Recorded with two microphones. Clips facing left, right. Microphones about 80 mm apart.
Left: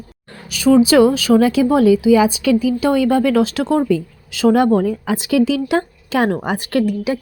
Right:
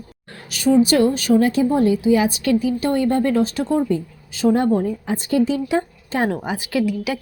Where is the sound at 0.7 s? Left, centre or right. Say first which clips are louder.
Left 4 dB; left.